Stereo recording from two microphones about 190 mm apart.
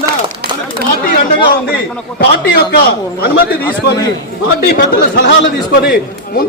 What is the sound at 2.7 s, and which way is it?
Speech, 55° left (ahead or behind).